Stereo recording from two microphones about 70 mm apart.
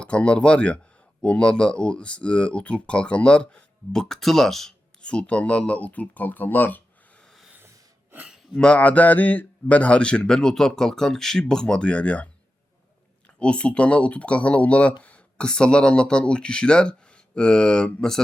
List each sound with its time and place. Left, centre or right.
0.0 s a man's voice: centre
5.0 s speech: centre
8.5 s a man's voice: centre